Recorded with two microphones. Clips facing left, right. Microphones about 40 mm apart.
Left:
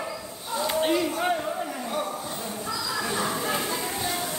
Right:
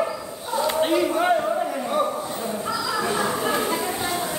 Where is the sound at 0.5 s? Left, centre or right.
Centre.